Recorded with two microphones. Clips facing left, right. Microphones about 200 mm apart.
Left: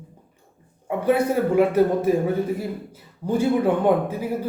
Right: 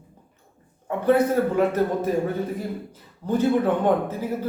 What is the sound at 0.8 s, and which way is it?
A man's voice, 10° left (ahead or behind).